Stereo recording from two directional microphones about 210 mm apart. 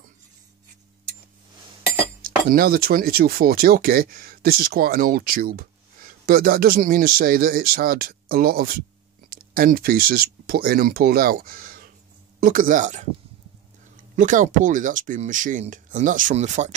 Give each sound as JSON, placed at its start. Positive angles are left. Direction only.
{"t": 2.5, "sound": "speech", "side_deg": -45}
{"t": 14.1, "sound": "speech", "side_deg": -35}